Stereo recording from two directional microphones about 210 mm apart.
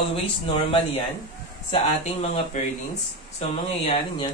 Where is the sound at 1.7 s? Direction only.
30° left (ahead or behind).